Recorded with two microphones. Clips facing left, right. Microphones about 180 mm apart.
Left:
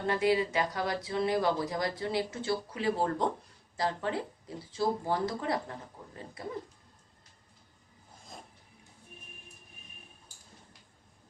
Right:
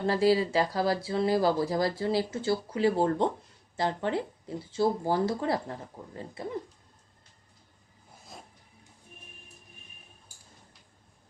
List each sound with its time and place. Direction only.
0.1 s speech: 35° right (ahead or behind)